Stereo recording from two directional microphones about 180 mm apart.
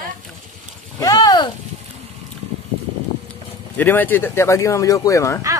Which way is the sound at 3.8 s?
10° left (ahead or behind).